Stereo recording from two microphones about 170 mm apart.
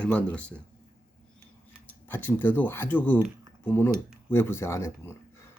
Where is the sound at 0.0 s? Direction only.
5° left (ahead or behind).